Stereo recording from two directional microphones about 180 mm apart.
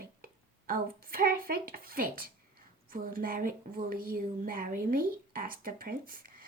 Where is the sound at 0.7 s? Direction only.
55° right (ahead or behind).